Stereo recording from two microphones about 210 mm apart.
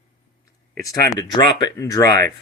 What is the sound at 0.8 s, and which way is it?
Speech, 15° left (ahead or behind).